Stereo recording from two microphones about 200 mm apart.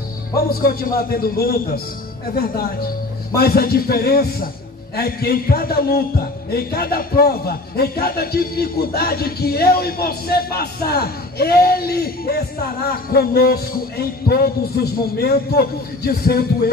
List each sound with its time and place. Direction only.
0.5 s a man's voice: 50° left (ahead or behind)